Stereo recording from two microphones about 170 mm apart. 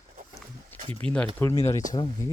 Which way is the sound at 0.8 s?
35° right (ahead or behind).